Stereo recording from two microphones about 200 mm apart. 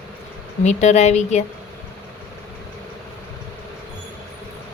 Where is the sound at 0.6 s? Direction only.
35° left (ahead or behind).